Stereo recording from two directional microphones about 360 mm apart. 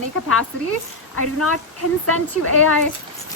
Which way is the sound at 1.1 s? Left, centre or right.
Left.